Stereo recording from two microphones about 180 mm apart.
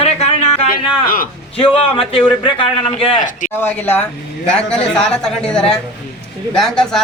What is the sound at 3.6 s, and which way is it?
A man's voice, 10° left (ahead or behind).